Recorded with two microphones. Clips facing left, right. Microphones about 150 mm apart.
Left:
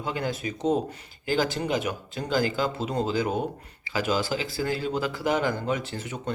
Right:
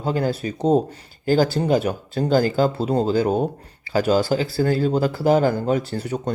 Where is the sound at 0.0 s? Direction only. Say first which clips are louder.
Right 7 dB; 35° right (ahead or behind).